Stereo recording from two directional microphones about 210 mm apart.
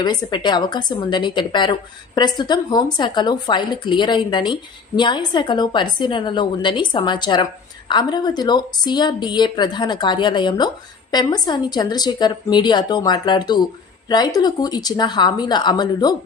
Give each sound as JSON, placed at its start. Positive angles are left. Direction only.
{"t": 0.0, "sound": "a woman's voice", "side_deg": 20}